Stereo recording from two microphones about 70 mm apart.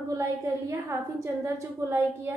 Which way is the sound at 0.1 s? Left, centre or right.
Right.